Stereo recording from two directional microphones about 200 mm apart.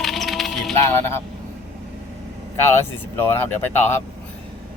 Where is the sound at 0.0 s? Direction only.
Centre (ahead or behind).